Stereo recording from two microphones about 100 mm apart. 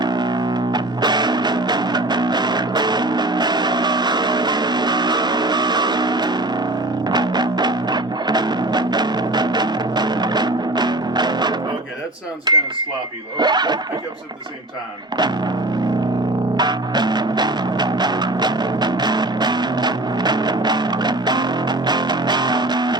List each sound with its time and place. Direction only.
0.0 s music: 45° right (ahead or behind)
12.5 s a sound: 45° right (ahead or behind)
13.4 s speech: 45° right (ahead or behind)
16.6 s music: 45° right (ahead or behind)